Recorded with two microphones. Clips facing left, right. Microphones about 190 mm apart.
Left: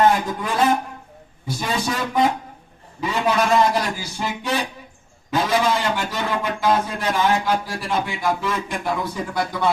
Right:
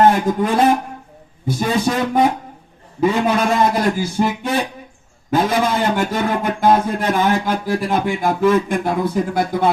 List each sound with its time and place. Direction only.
0.0 s a sound: 50° right (ahead or behind)
1.5 s a man's voice: 50° right (ahead or behind)
3.0 s a man's voice: 55° right (ahead or behind)